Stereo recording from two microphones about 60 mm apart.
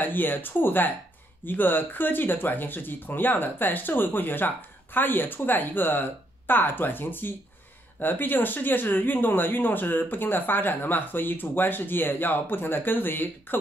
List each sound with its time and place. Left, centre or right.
0.0 s speech: left